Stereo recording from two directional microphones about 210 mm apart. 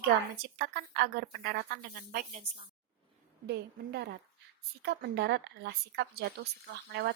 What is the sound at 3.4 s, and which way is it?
A woman's voice, 50° right (ahead or behind).